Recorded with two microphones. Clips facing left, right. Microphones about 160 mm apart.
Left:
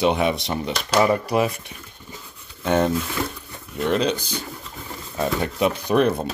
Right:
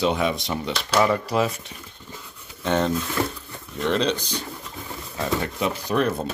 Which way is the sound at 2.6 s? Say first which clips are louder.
Left 2 dB; 10° left (ahead or behind).